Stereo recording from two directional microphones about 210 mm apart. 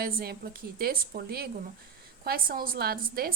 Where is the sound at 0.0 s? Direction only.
45° right (ahead or behind).